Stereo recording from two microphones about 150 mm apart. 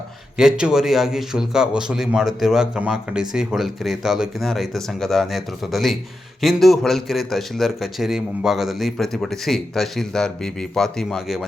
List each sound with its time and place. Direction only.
0.3 s a man's voice: 5° right (ahead or behind)